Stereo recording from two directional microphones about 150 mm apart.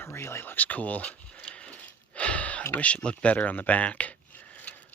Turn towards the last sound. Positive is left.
turn(degrees=10)  # may be behind; listen again after turning